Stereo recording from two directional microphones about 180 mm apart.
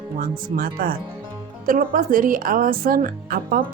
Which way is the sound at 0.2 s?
50° right (ahead or behind).